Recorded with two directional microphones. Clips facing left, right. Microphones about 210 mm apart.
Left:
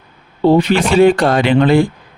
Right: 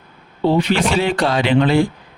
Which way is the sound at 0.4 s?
50° left (ahead or behind).